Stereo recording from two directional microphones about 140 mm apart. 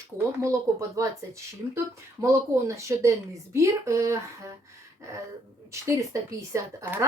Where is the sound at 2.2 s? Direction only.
20° right (ahead or behind).